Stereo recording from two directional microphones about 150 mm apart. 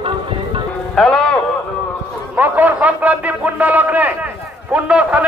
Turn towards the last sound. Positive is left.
turn(degrees=-10)  # may be behind; listen again after turning